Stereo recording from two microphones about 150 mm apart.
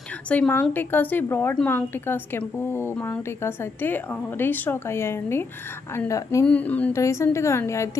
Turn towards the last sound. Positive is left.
turn(degrees=20)  # may be behind; listen again after turning